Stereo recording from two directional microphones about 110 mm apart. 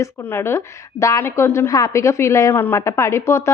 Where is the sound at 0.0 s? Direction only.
20° left (ahead or behind).